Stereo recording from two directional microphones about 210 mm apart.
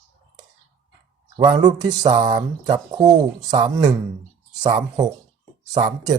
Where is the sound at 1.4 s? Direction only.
20° right (ahead or behind).